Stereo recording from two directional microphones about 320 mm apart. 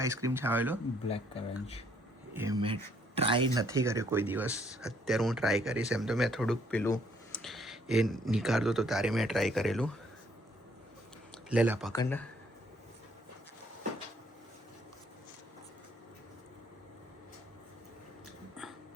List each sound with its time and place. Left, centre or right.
0.0 s speech: centre
1.0 s speech: centre
2.3 s speech: centre
11.4 s speech: centre
11.9 s speech: centre
18.6 s a sound: centre